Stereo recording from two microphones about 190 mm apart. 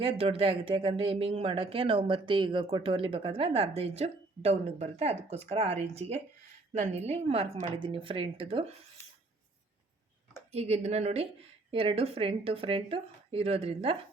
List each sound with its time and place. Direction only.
0.0 s speech: 30° right (ahead or behind)
10.5 s a woman's voice: 35° right (ahead or behind)